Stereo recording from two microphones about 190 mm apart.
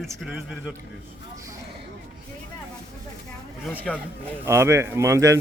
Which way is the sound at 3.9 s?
Centre (ahead or behind).